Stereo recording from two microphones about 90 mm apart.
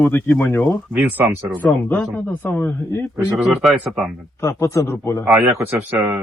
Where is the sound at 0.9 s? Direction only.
15° right (ahead or behind).